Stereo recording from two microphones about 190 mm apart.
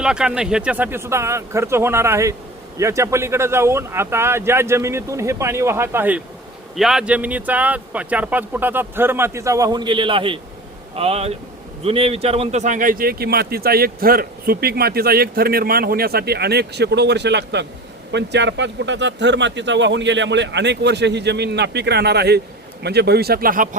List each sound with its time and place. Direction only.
0.0 s a man's voice: 5° right (ahead or behind); by 23.6 s 50° right (ahead or behind)